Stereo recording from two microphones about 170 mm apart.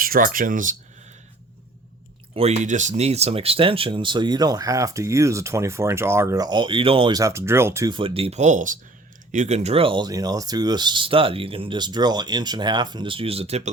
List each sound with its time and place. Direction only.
0.0 s speech: 55° right (ahead or behind)
2.3 s speech: 40° right (ahead or behind)
7.2 s speech: 15° right (ahead or behind)
7.9 s speech: 30° right (ahead or behind)